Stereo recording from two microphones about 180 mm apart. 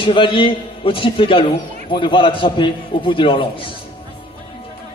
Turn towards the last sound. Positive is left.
turn(degrees=30)  # may be behind; listen again after turning